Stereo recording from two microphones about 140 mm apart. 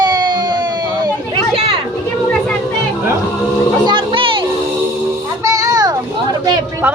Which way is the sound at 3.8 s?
40° right (ahead or behind).